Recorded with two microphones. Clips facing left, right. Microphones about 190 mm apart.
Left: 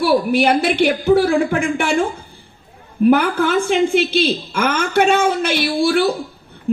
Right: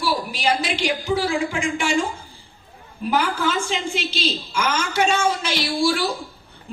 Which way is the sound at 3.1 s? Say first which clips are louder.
Left 6 dB; 60° left (ahead or behind).